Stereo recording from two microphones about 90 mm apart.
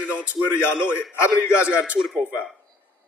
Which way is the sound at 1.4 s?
10° right (ahead or behind).